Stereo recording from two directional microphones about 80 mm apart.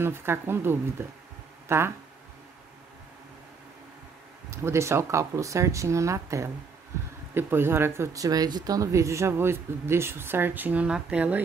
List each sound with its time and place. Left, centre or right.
0.0 s speech: right
4.5 s speech: right; by 11.4 s centre